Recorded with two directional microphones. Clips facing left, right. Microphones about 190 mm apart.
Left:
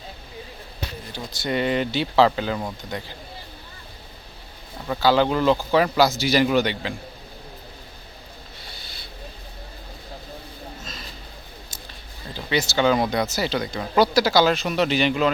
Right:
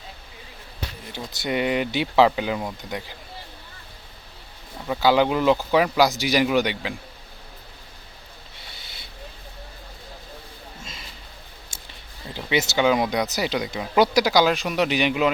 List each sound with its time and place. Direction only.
1.1 s speech: 20° right (ahead or behind)
4.9 s speech: 15° right (ahead or behind)
12.3 s speech: 20° right (ahead or behind)